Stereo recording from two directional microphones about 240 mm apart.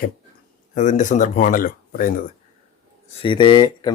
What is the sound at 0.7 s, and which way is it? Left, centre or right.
Speech, left.